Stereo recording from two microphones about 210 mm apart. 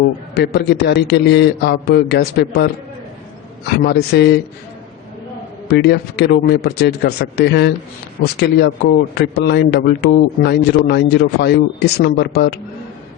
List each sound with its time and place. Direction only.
0.3 s speech: 50° left (ahead or behind)
3.8 s speech: 50° left (ahead or behind)
5.6 s speech: 50° left (ahead or behind)